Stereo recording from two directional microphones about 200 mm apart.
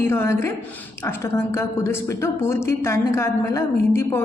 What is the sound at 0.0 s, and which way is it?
A woman's voice, 10° left (ahead or behind).